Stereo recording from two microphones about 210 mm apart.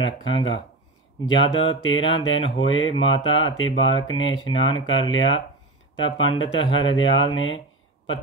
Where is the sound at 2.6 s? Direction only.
65° left (ahead or behind).